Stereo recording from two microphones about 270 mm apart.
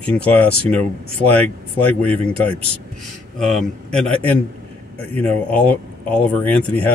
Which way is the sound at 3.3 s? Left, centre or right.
Centre.